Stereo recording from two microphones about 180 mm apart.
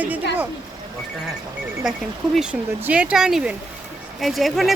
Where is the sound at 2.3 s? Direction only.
5° right (ahead or behind).